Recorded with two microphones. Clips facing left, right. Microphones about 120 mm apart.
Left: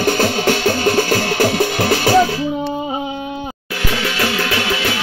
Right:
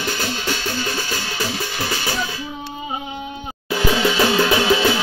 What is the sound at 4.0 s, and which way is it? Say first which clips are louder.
Music: right 2 dB; 20° right (ahead or behind).